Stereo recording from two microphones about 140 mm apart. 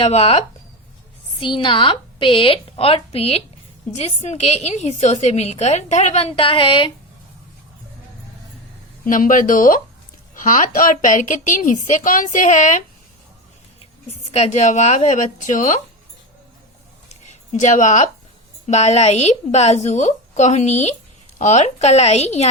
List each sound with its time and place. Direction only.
0.0 s a woman's voice: 45° left (ahead or behind)
9.0 s a woman's voice: 70° left (ahead or behind)
14.1 s a woman's voice: 50° left (ahead or behind); by 15.8 s 65° left (ahead or behind)
17.2 s a woman's voice: 60° left (ahead or behind)